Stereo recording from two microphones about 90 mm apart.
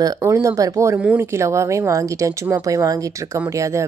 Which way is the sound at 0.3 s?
35° right (ahead or behind).